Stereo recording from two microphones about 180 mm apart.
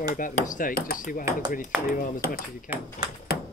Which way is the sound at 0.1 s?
45° left (ahead or behind).